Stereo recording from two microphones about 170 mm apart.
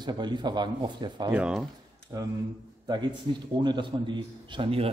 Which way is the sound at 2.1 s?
20° right (ahead or behind).